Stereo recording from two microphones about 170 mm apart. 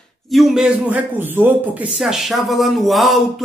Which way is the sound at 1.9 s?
Centre (ahead or behind).